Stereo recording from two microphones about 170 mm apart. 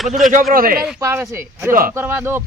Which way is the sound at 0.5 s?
60° right (ahead or behind).